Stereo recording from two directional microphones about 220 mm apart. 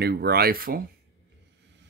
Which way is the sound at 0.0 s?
45° right (ahead or behind).